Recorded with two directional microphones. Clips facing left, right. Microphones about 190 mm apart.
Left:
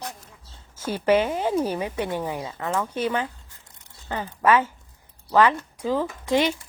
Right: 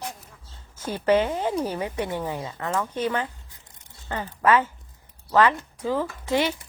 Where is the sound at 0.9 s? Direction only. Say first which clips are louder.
Even; 10° left (ahead or behind).